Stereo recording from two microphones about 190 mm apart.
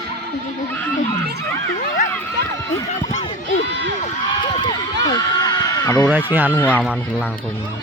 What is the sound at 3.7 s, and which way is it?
Run, 70° right (ahead or behind).